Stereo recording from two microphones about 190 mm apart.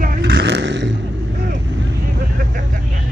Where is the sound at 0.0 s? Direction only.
60° right (ahead or behind).